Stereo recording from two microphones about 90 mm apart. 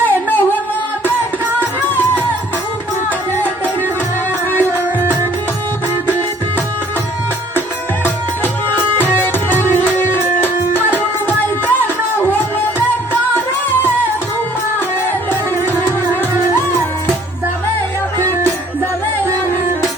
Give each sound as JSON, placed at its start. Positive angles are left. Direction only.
{"t": 0.0, "sound": "music", "side_deg": 20}
{"t": 1.9, "sound": "music", "side_deg": 20}
{"t": 9.1, "sound": "music", "side_deg": 25}
{"t": 10.8, "sound": "music", "side_deg": -15}
{"t": 11.6, "sound": "music", "side_deg": 20}
{"t": 15.3, "sound": "music", "side_deg": 25}
{"t": 16.0, "sound": "music", "side_deg": -35}